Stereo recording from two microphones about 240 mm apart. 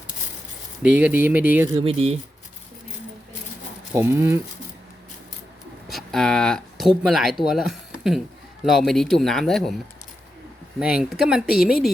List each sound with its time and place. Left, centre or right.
0.8 s speech: centre
1.8 s speech: right
3.9 s speech: centre
5.9 s speech: centre
10.8 s speech: centre